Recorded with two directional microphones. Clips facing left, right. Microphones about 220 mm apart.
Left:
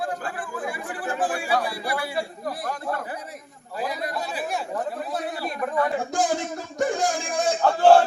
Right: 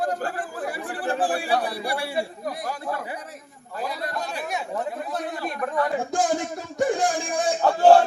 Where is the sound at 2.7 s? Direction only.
5° right (ahead or behind).